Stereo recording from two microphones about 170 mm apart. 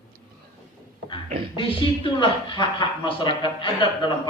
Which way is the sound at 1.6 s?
30° left (ahead or behind).